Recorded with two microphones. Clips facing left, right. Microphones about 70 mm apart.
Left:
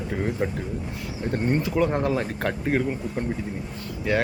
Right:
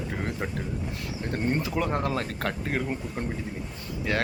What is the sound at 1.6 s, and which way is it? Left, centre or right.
Speech, centre.